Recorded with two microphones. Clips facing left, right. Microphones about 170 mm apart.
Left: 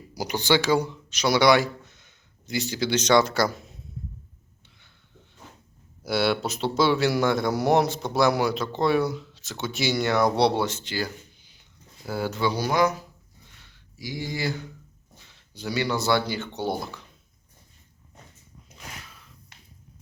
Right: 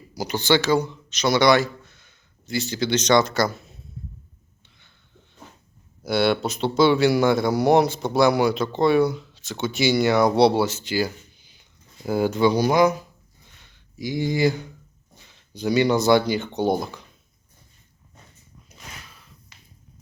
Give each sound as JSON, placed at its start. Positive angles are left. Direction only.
{"t": 0.1, "sound": "speech", "side_deg": 15}
{"t": 6.0, "sound": "speech", "side_deg": 5}